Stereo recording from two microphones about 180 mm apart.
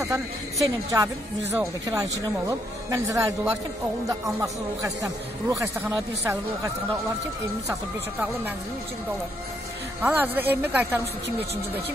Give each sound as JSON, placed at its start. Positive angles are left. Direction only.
{"t": 0.0, "sound": "a man's voice", "side_deg": -15}
{"t": 10.0, "sound": "a man's voice", "side_deg": -10}